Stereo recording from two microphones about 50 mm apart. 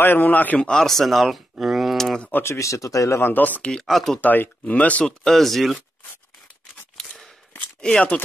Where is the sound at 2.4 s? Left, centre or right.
Left.